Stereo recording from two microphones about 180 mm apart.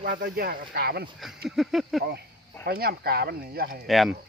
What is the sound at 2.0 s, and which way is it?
Speech, 65° right (ahead or behind).